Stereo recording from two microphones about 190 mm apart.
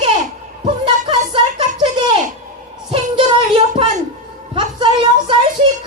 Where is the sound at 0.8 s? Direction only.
25° right (ahead or behind).